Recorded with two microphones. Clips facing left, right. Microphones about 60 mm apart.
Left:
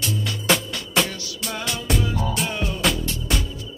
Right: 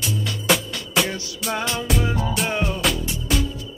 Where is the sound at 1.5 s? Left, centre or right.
Right.